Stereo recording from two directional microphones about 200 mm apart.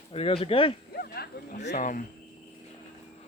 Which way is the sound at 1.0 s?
50° left (ahead or behind).